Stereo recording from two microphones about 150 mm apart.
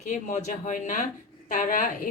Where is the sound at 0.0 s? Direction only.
55° left (ahead or behind).